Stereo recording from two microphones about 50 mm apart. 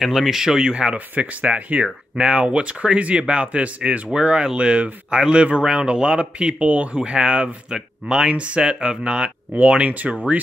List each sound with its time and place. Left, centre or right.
0.0 s speech: centre
0.9 s speech: right